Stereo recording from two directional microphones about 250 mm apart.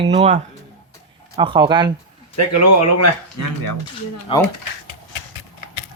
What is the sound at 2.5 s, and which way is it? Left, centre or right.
Speech, left.